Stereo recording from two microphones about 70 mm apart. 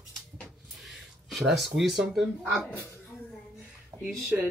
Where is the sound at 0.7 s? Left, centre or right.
Centre.